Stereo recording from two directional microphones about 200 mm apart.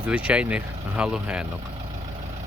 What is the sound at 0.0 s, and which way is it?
Speech, 5° right (ahead or behind).